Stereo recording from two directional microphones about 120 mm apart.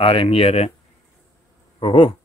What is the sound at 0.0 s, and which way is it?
Speech, 50° left (ahead or behind).